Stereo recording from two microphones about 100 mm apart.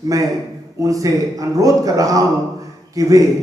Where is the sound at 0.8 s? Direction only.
35° right (ahead or behind).